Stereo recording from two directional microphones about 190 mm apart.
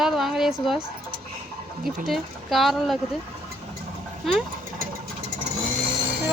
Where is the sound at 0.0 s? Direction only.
Centre (ahead or behind).